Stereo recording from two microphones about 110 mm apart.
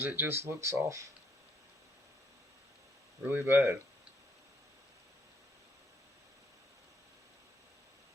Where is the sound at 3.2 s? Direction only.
20° right (ahead or behind).